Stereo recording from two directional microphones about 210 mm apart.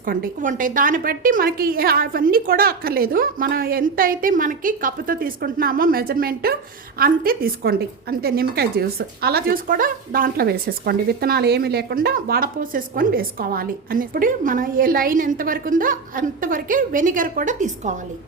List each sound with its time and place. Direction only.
0.0 s a woman's voice: 45° right (ahead or behind)